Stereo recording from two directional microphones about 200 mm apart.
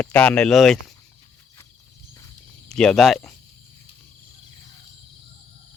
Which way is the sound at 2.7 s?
5° left (ahead or behind).